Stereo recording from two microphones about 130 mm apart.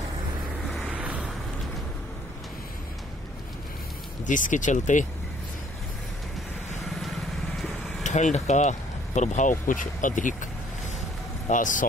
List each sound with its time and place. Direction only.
0.8 s a sound: 10° right (ahead or behind)
4.3 s speech: 80° left
7.0 s vehicle: centre (ahead or behind)
8.0 s speech: 65° left (ahead or behind); by 11.8 s 80° left